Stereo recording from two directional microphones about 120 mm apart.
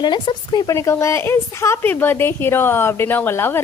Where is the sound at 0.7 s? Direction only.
25° left (ahead or behind).